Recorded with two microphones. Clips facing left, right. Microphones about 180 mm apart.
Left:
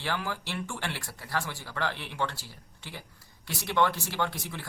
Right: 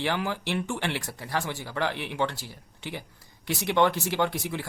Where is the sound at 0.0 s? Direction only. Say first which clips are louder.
Right 5 dB; 20° right (ahead or behind).